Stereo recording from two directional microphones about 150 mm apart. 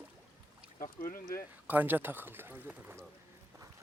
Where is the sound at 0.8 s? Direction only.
70° left (ahead or behind).